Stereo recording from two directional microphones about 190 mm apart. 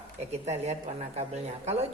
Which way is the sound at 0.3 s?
35° right (ahead or behind).